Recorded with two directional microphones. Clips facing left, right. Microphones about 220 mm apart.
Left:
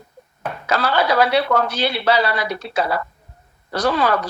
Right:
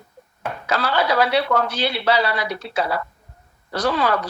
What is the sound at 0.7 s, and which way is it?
A woman's voice, 45° left (ahead or behind).